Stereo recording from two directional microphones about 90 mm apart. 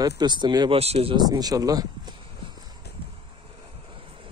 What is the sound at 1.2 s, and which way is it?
Speech, 45° right (ahead or behind).